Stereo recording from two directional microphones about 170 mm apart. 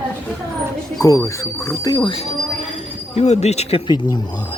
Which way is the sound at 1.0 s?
20° left (ahead or behind).